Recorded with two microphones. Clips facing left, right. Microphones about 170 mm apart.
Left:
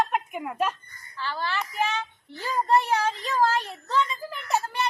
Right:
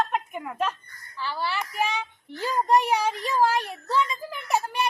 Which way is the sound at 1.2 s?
10° right (ahead or behind).